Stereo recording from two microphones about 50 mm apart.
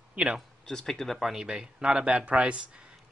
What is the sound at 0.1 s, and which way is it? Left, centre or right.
Speech, right.